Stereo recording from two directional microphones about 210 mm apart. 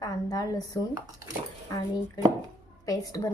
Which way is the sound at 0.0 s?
20° left (ahead or behind).